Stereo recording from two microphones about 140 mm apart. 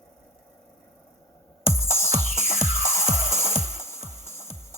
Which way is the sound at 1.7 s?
15° left (ahead or behind).